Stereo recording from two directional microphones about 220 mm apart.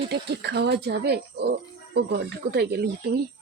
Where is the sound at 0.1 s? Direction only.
50° right (ahead or behind).